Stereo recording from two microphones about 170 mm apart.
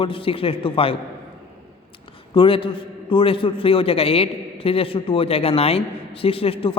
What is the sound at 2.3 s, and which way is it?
A man's voice, 30° left (ahead or behind).